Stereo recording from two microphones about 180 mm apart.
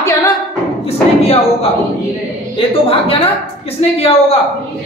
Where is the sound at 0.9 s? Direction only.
35° left (ahead or behind).